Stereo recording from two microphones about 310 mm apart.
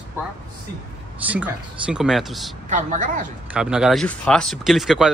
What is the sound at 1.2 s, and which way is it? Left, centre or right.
Speech, centre.